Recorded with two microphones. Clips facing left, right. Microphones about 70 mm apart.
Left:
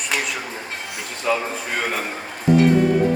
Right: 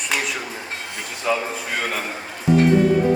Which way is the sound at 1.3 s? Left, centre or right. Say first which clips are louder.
Left 1 dB; centre.